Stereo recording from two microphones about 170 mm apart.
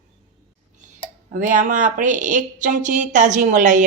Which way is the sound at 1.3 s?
50° right (ahead or behind).